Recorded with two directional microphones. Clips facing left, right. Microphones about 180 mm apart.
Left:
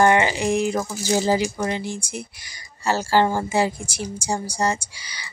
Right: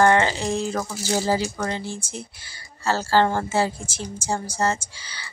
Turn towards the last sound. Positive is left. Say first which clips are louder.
# left 1 dB
turn(degrees=15)  # may be behind; listen again after turning